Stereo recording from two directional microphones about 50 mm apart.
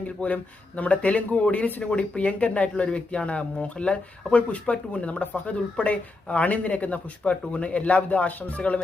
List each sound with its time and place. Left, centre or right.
0.2 s speech: left
1.8 s speech: centre